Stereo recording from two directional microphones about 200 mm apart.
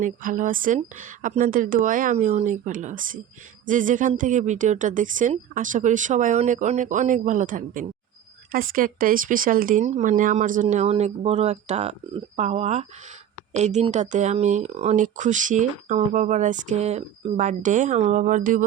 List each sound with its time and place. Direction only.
0.0 s speech: 40° right (ahead or behind)